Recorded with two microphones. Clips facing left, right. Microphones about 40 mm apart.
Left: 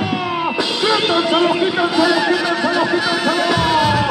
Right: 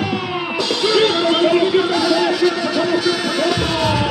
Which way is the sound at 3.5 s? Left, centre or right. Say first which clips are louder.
Left 4 dB; centre.